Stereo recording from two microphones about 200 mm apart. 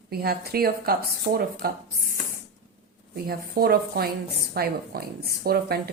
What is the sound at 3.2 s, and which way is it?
Speech, 50° right (ahead or behind).